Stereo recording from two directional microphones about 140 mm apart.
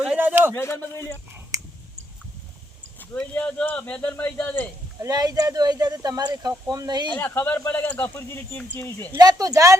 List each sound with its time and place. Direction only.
0.0 s a sound: 5° right (ahead or behind)
0.5 s speech: 20° left (ahead or behind)
3.2 s speech: 5° left (ahead or behind)
4.9 s speech: 25° right (ahead or behind)
7.2 s speech: 15° left (ahead or behind)
9.1 s speech: 25° right (ahead or behind)